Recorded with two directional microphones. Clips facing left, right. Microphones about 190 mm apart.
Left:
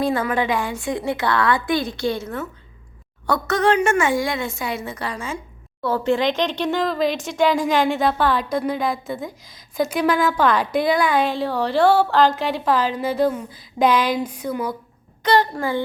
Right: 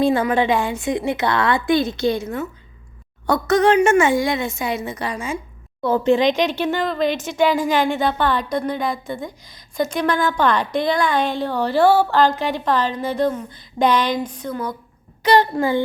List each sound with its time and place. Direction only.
0.0 s a woman's voice: 25° right (ahead or behind); by 14.8 s 10° left (ahead or behind)
15.2 s a woman's voice: 15° right (ahead or behind)